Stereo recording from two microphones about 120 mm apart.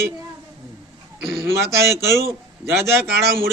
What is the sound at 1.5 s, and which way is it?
A man's voice, 25° right (ahead or behind).